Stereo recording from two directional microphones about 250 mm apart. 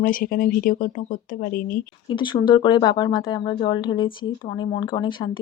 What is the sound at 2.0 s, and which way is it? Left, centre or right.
Speech, centre.